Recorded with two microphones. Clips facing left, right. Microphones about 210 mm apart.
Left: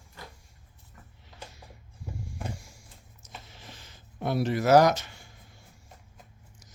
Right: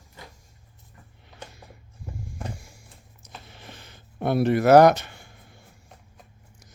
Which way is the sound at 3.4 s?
60° right (ahead or behind).